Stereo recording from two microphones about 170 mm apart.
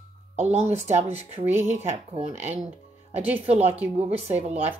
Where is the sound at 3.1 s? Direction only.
10° right (ahead or behind).